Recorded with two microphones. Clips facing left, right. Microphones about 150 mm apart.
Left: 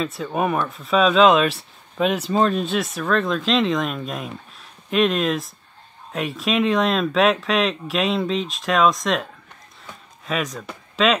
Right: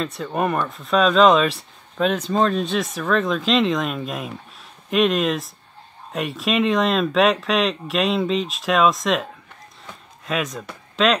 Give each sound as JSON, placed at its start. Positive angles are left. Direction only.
{"t": 0.0, "sound": "speech", "side_deg": 5}